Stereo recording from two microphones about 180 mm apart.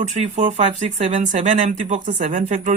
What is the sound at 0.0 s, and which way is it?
Speech, 40° right (ahead or behind).